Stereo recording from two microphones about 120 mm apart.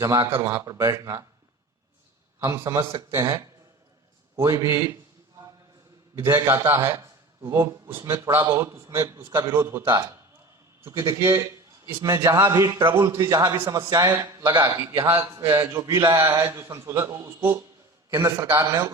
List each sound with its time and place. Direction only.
0.0 s a man's voice: 25° right (ahead or behind)
2.4 s a man's voice: 25° right (ahead or behind)
6.1 s a man's voice: 20° right (ahead or behind)